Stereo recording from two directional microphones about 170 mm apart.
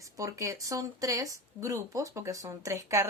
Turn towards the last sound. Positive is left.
turn(degrees=-20)  # may be behind; listen again after turning